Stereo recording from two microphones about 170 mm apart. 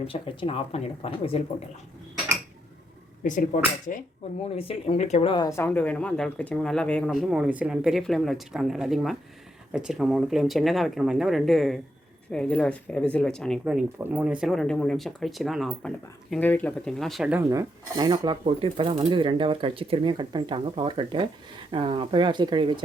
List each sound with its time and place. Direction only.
0.1 s speech: 30° left (ahead or behind)
3.2 s speech: 50° left (ahead or behind)
4.5 s speech: 35° left (ahead or behind)
5.5 s speech: 10° left (ahead or behind); by 17.4 s 5° right (ahead or behind)
17.4 s speech: 20° right (ahead or behind)